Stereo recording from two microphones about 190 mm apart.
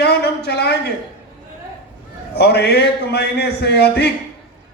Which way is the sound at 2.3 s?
60° left (ahead or behind).